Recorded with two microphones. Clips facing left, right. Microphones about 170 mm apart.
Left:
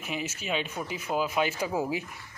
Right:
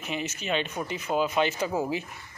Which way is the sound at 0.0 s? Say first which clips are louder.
Right 2 dB; 10° left (ahead or behind).